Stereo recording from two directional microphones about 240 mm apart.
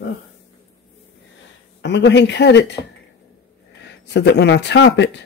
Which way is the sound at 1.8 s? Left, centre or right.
Left.